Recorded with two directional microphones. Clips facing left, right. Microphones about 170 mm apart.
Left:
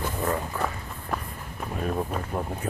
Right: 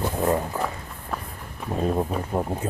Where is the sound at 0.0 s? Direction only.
25° right (ahead or behind).